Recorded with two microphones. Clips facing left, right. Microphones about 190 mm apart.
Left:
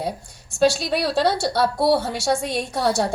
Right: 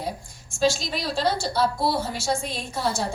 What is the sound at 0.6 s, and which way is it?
A woman's voice, 65° left (ahead or behind).